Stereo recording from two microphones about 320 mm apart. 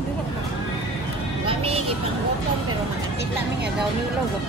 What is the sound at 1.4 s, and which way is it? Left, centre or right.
Vehicle, centre.